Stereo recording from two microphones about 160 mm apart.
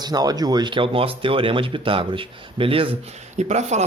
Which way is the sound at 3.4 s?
45° right (ahead or behind).